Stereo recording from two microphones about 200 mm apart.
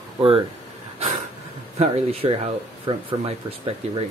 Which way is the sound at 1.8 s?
30° right (ahead or behind).